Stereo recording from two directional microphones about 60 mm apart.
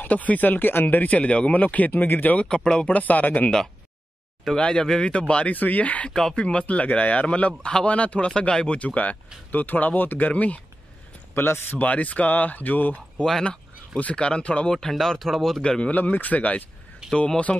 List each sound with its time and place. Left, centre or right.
0.0 s speech: left
2.4 s speech: centre
2.9 s speech: left
4.6 s speech: centre
6.1 s speech: centre
11.3 s speech: left
11.8 s speech: left
13.2 s speech: centre
14.7 s speech: centre
15.6 s speech: centre
15.9 s speech: left